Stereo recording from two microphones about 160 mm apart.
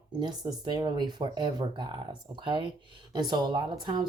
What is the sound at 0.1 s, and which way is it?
Speech, 30° right (ahead or behind).